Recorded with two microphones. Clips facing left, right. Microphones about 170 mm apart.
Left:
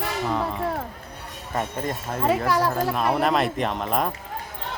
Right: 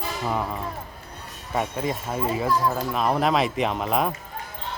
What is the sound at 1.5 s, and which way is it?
Speech, 5° right (ahead or behind).